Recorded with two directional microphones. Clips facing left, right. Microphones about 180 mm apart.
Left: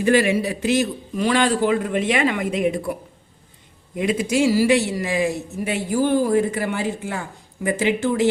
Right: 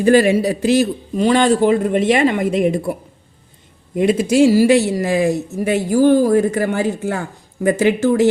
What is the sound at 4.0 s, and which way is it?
A woman's voice, 40° right (ahead or behind).